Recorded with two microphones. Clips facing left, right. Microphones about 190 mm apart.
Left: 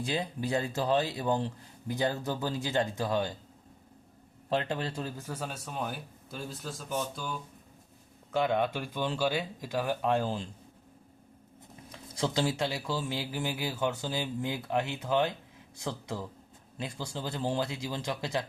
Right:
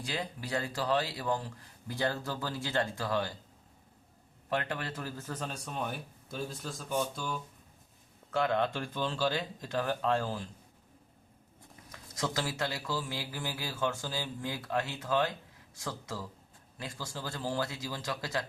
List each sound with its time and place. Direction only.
0.0 s speech: 25° left (ahead or behind)
4.4 s speech: 25° left (ahead or behind); by 6.8 s centre (ahead or behind)
8.3 s speech: 15° left (ahead or behind)
11.9 s speech: 25° left (ahead or behind)